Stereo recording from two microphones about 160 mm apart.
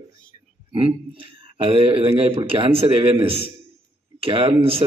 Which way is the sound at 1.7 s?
35° right (ahead or behind).